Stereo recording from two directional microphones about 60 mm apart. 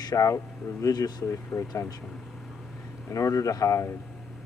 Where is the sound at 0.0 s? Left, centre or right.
Left.